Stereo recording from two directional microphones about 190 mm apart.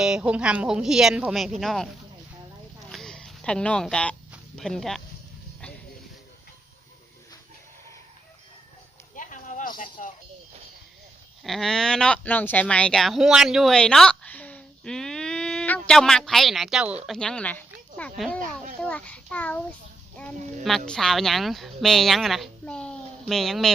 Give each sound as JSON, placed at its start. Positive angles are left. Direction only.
{"t": 0.0, "sound": "speech", "side_deg": -5}
{"t": 2.9, "sound": "a sound", "side_deg": 0}
{"t": 4.5, "sound": "speech", "side_deg": 0}
{"t": 9.1, "sound": "a sound", "side_deg": 40}
{"t": 11.4, "sound": "speech", "side_deg": 0}
{"t": 18.3, "sound": "speech", "side_deg": -40}
{"t": 18.8, "sound": "a child's voice", "side_deg": 5}